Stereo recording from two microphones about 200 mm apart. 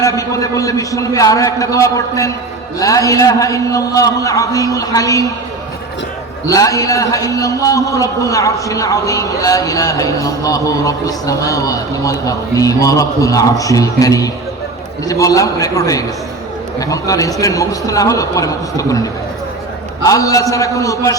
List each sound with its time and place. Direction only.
0.0 s a man's voice: 15° left (ahead or behind)
6.5 s a man's voice: 15° left (ahead or behind)
20.1 s a man's voice: 15° left (ahead or behind)